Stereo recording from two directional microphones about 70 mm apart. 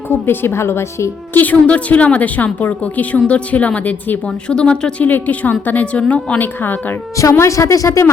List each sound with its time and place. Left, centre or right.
0.1 s a woman's voice: left
1.3 s a woman's voice: left
4.3 s speech: centre
6.4 s a woman's voice: left
7.2 s speech: left